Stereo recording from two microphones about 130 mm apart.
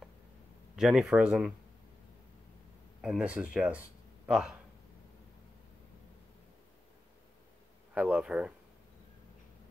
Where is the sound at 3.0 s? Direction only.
5° right (ahead or behind).